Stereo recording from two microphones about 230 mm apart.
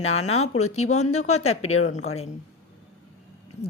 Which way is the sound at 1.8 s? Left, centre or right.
Left.